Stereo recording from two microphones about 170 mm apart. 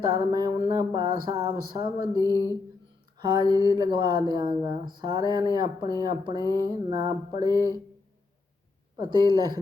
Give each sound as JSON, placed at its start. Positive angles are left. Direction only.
{"t": 0.1, "sound": "speech", "side_deg": -20}
{"t": 9.0, "sound": "speech", "side_deg": -25}